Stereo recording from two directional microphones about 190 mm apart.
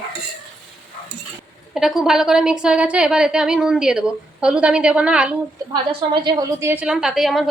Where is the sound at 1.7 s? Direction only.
Centre (ahead or behind).